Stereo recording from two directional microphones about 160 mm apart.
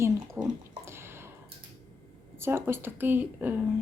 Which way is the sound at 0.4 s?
15° right (ahead or behind).